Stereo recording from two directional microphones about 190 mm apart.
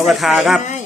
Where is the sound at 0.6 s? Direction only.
40° left (ahead or behind).